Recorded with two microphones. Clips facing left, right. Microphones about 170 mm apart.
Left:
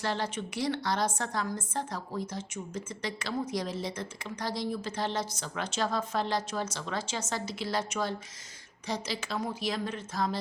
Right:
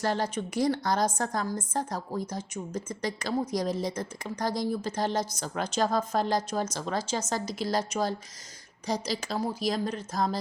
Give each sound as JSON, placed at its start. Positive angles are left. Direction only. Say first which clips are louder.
{"t": 0.0, "sound": "a woman's voice", "louder": "right 4 dB", "side_deg": -45}